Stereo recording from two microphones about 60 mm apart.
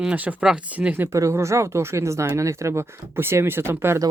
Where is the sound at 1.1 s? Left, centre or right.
Right.